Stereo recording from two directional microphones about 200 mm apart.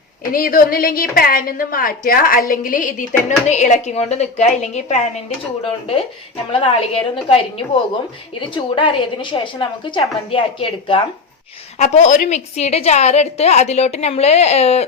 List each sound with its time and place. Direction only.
0.3 s a woman's voice: 45° left (ahead or behind)
6.5 s a woman's voice: 30° left (ahead or behind)